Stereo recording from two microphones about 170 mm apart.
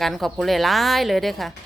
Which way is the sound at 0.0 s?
Centre (ahead or behind).